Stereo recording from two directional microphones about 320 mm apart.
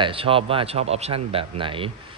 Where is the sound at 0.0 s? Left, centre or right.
Centre.